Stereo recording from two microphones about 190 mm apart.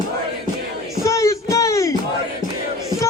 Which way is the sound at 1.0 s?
15° left (ahead or behind).